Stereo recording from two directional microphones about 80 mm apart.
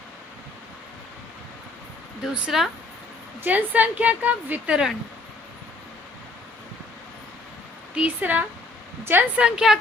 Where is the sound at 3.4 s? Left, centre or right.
Right.